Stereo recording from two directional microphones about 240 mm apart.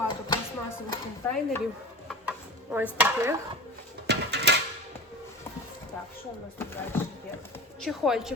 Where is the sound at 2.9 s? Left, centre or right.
Centre.